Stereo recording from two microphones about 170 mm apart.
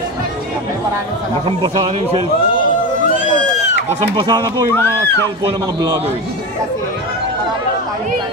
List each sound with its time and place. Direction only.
1.6 s a man's voice: 30° right (ahead or behind)
4.0 s a man's voice: 25° right (ahead or behind)